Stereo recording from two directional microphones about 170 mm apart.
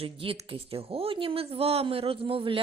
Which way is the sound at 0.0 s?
35° right (ahead or behind).